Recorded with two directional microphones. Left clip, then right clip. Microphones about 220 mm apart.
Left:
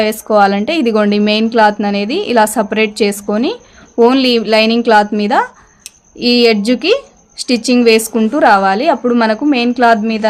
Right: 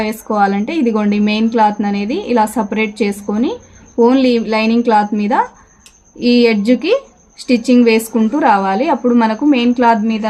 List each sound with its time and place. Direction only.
0.0 s a woman's voice: 30° left (ahead or behind)